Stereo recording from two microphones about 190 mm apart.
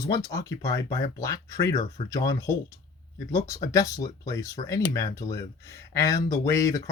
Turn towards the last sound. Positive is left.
turn(degrees=15)  # may be behind; listen again after turning